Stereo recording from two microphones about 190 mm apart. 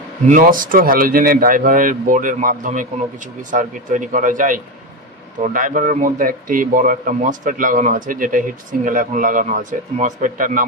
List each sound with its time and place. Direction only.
0.3 s speech: 45° right (ahead or behind)